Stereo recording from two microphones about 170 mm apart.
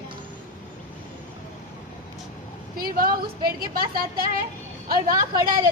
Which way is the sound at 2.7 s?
60° right (ahead or behind).